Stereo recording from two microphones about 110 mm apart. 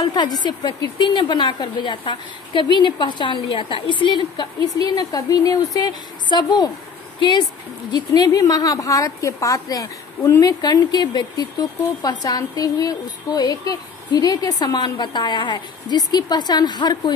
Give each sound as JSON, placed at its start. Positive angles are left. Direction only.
{"t": 0.0, "sound": "a woman's voice", "side_deg": 40}
{"t": 7.9, "sound": "a woman's voice", "side_deg": 35}